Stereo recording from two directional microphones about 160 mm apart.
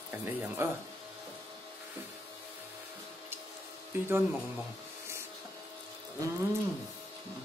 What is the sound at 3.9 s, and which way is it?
Speech, 15° right (ahead or behind).